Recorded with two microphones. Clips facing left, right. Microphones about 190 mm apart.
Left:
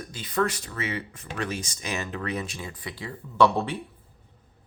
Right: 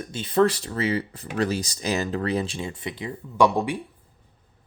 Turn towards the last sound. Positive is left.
turn(degrees=-15)  # may be behind; listen again after turning